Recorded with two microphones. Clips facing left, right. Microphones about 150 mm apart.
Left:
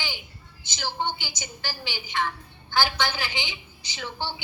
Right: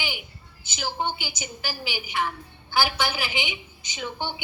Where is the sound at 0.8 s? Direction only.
15° right (ahead or behind).